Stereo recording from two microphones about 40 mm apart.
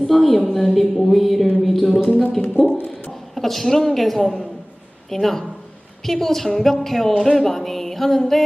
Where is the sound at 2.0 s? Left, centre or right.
Left.